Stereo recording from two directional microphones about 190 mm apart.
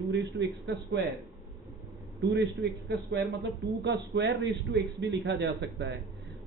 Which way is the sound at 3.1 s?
65° right (ahead or behind).